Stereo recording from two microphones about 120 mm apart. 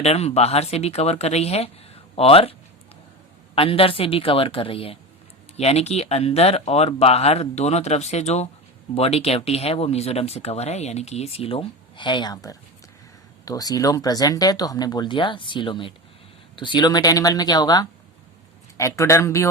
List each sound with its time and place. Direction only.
0.0 s speech: 60° left (ahead or behind)
5.5 s speech: 60° left (ahead or behind); by 19.5 s 25° left (ahead or behind)